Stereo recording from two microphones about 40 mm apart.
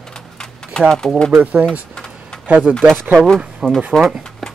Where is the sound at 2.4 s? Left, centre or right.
Right.